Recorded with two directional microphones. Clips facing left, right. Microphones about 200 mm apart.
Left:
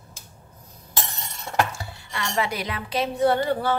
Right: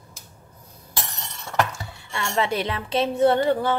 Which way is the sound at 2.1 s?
25° right (ahead or behind).